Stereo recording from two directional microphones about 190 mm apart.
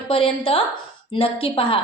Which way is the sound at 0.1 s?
30° left (ahead or behind).